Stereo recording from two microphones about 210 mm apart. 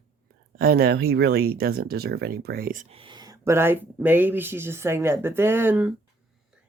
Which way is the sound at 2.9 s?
25° right (ahead or behind).